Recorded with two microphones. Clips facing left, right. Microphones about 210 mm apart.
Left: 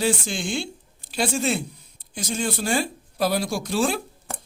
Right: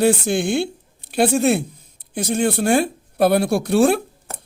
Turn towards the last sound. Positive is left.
turn(degrees=-60)  # may be behind; listen again after turning